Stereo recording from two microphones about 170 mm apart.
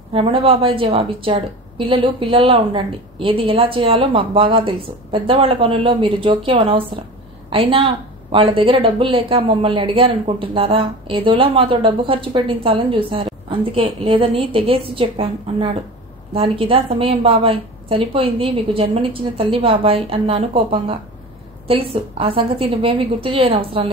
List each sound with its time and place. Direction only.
0.1 s a woman's voice: 35° right (ahead or behind)